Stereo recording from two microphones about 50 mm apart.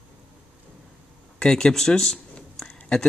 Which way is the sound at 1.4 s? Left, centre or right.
Centre.